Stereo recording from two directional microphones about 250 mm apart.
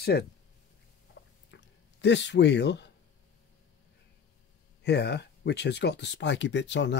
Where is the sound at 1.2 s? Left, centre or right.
Left.